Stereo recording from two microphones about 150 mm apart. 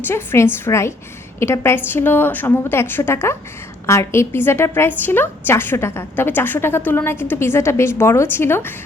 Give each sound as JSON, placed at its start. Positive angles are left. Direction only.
{"t": 0.0, "sound": "a woman's voice", "side_deg": 15}